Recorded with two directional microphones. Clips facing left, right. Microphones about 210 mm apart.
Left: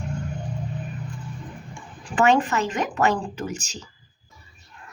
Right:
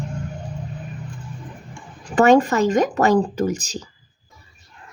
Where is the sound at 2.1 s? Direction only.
40° right (ahead or behind).